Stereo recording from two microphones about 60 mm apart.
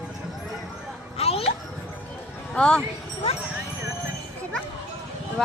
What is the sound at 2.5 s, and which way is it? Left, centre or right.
Speech, centre.